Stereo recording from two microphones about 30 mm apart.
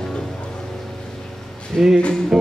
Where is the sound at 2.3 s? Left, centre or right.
Right.